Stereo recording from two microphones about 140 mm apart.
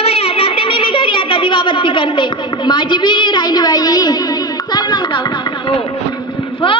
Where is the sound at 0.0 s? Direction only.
45° left (ahead or behind).